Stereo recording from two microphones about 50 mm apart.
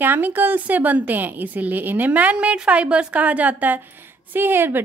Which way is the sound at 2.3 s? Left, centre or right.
Right.